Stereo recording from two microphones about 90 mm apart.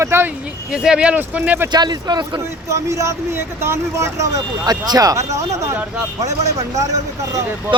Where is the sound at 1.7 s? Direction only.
50° right (ahead or behind).